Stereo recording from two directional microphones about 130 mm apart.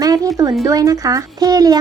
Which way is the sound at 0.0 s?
25° right (ahead or behind).